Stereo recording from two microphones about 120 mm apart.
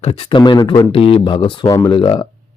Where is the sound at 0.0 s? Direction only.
50° left (ahead or behind).